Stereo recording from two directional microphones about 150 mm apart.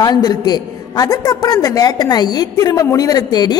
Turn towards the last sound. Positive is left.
turn(degrees=25)  # may be behind; listen again after turning